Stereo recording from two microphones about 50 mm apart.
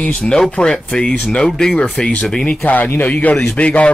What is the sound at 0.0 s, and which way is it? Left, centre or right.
Speech, left.